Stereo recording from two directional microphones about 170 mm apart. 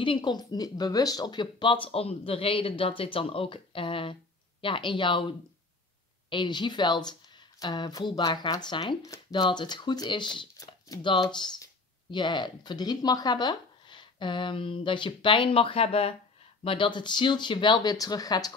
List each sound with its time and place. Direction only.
0.0 s speech: 30° left (ahead or behind)
6.3 s speech: 25° left (ahead or behind)